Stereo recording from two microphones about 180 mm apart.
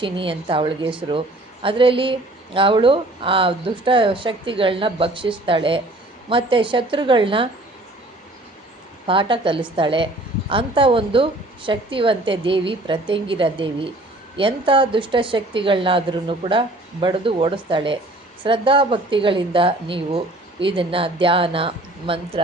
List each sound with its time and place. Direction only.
0.0 s speech: 30° right (ahead or behind)
9.0 s speech: 30° right (ahead or behind)